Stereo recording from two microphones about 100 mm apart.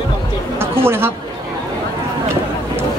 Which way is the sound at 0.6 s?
25° right (ahead or behind).